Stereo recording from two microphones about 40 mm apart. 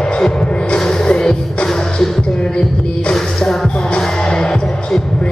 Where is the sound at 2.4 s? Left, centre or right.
Left.